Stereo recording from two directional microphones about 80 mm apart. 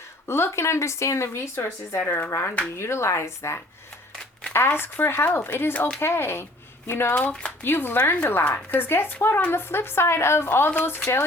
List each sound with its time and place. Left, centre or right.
0.3 s speech: left
7.1 s speech: centre